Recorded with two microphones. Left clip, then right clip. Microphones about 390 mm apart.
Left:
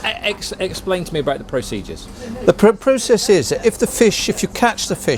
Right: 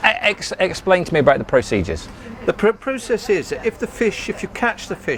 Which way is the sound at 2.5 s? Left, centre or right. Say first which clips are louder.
Left 6 dB; left.